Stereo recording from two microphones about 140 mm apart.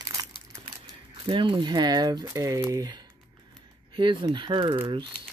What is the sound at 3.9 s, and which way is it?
Speech, 35° right (ahead or behind).